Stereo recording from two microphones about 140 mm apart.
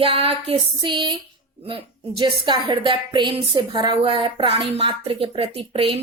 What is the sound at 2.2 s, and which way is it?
A woman's voice, 35° right (ahead or behind).